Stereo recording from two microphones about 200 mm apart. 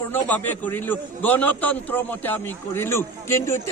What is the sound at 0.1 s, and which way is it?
A man's voice, 10° left (ahead or behind).